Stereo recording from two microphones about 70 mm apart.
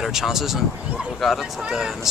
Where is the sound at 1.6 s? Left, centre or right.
Centre.